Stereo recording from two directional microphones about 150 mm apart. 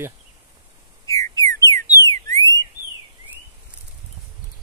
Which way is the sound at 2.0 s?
20° left (ahead or behind).